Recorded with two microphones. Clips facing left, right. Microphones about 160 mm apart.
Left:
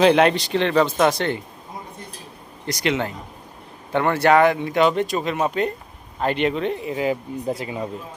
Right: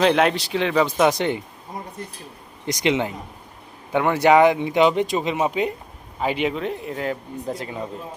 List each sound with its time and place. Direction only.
0.0 s speech: centre (ahead or behind); by 1.4 s 15° right (ahead or behind)
2.6 s speech: 15° right (ahead or behind); by 7.8 s 10° left (ahead or behind)